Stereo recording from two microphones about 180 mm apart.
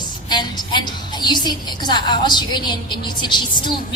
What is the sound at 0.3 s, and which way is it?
A woman's voice, 25° left (ahead or behind).